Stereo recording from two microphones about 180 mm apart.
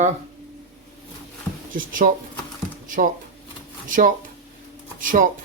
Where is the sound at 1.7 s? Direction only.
50° right (ahead or behind).